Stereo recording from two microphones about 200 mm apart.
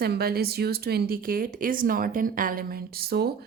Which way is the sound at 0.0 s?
50° right (ahead or behind).